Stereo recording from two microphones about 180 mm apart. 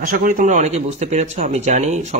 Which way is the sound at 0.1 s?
50° right (ahead or behind).